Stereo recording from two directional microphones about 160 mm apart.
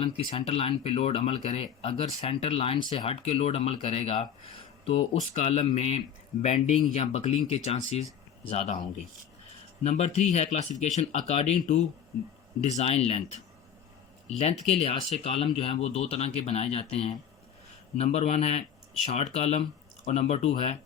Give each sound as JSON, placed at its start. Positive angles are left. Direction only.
{"t": 0.0, "sound": "speech", "side_deg": 35}
{"t": 9.8, "sound": "speech", "side_deg": 40}